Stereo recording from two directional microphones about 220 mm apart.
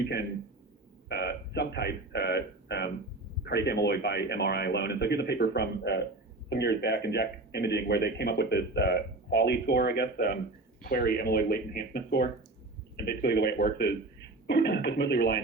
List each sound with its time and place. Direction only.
1.0 s a man's voice: 50° left (ahead or behind)